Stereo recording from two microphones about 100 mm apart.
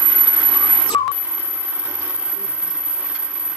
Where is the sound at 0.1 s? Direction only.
10° right (ahead or behind).